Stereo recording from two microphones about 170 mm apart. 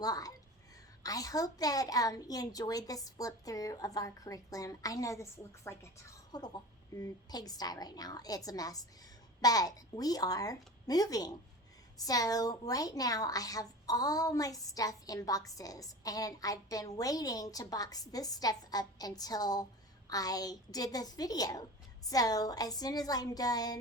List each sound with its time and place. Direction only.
0.0 s a woman's voice: 20° left (ahead or behind)